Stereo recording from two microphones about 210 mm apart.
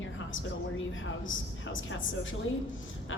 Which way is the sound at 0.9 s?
65° left (ahead or behind).